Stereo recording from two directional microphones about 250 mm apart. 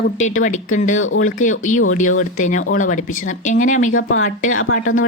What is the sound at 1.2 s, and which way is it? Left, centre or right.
Speech, left.